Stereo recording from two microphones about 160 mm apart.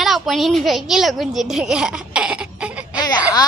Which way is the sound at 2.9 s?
25° left (ahead or behind).